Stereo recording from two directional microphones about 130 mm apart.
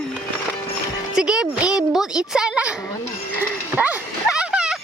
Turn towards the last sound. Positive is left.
turn(degrees=-5)  # may be behind; listen again after turning